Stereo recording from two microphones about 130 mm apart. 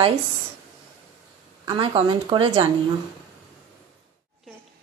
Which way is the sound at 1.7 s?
40° right (ahead or behind).